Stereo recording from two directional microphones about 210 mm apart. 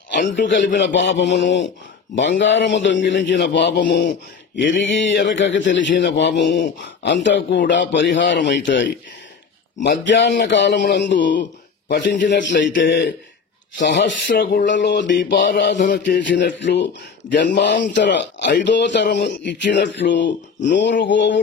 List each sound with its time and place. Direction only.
0.2 s a man's voice: 60° left (ahead or behind)
15.5 s a sound: 40° left (ahead or behind)
16.3 s a man's voice: 55° left (ahead or behind)
20.2 s speech: 40° left (ahead or behind)
21.0 s a man's voice: 60° left (ahead or behind)